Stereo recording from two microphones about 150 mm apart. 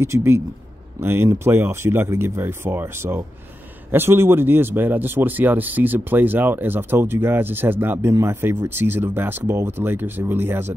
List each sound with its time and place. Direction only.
0.0 s speech: 15° right (ahead or behind)